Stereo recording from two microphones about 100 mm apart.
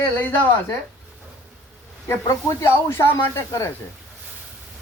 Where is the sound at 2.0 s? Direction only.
35° left (ahead or behind).